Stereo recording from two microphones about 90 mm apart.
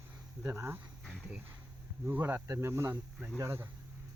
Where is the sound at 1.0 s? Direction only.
5° left (ahead or behind).